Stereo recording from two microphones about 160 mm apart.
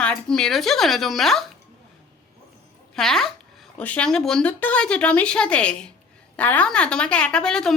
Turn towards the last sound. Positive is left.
turn(degrees=5)  # may be behind; listen again after turning